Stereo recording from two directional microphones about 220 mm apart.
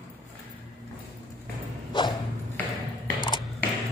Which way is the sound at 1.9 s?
20° left (ahead or behind).